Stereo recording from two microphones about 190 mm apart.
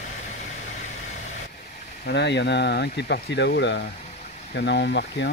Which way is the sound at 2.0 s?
65° left (ahead or behind).